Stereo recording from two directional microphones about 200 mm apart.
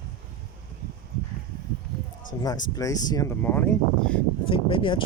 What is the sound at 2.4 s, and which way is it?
Speech, 20° left (ahead or behind).